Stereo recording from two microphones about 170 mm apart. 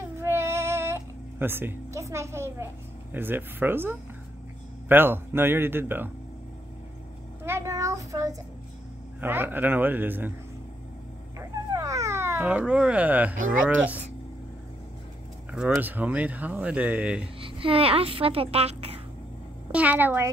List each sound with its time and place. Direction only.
0.2 s a sound: 15° right (ahead or behind)
4.8 s speech: 10° right (ahead or behind)
7.4 s a child's voice: 15° right (ahead or behind)
11.3 s dog: 20° right (ahead or behind)
15.5 s speech: 5° right (ahead or behind)
17.4 s a child's voice: 30° right (ahead or behind)
19.7 s speech: 10° right (ahead or behind)